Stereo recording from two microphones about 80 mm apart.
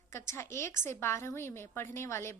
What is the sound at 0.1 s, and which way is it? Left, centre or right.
A woman's voice, left.